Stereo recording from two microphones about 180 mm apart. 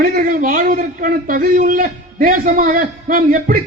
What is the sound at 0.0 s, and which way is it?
A man's voice, 55° right (ahead or behind).